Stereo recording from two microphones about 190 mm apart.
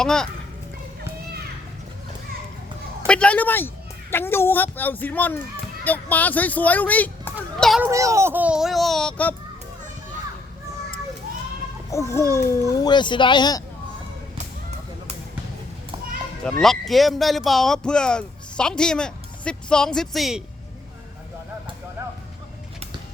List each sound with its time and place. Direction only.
0.0 s speech: 5° left (ahead or behind)
3.1 s a child's voice: 5° left (ahead or behind)
7.9 s speech: 15° right (ahead or behind); by 9.3 s 5° left (ahead or behind)
11.9 s a child's voice: 15° left (ahead or behind)
16.4 s speech: centre (ahead or behind)